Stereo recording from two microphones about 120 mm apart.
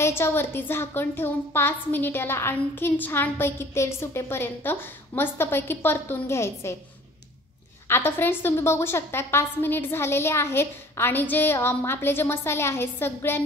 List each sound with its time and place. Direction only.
0.0 s a woman's voice: 20° left (ahead or behind)
7.9 s a woman's voice: 20° left (ahead or behind)